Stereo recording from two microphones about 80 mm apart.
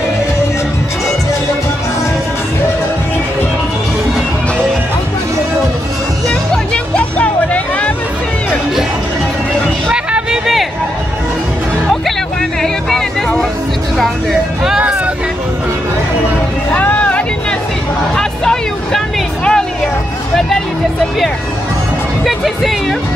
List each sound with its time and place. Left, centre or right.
6.5 s music: centre
9.8 s a sound: centre
12.6 s music: centre
14.6 s vehicle: centre
16.7 s music: centre
22.2 s music: centre